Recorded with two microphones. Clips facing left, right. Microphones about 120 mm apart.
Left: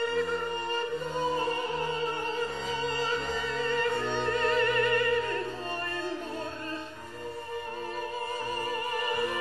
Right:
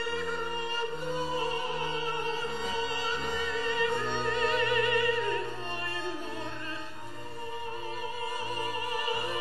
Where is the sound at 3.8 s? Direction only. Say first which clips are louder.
Left 1 dB; 45° left (ahead or behind).